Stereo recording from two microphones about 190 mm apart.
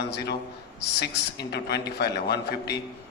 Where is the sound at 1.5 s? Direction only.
60° left (ahead or behind).